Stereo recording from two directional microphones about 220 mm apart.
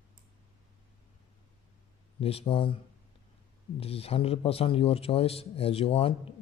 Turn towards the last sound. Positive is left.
turn(degrees=25)  # may be behind; listen again after turning